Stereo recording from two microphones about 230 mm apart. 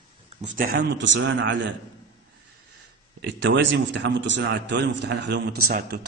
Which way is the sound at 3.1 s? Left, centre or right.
Right.